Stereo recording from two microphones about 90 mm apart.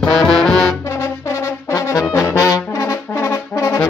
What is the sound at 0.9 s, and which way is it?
Brass instrument, 30° left (ahead or behind).